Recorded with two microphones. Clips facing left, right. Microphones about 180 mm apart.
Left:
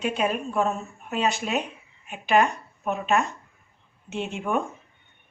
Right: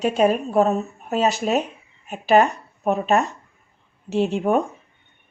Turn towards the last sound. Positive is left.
turn(degrees=-35)  # may be behind; listen again after turning